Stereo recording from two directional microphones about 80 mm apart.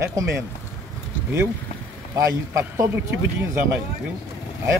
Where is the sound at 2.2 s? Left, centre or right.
Right.